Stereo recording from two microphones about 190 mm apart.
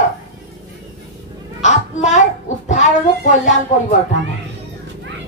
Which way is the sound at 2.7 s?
40° left (ahead or behind).